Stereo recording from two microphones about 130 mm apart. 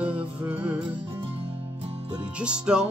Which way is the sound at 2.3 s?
10° right (ahead or behind).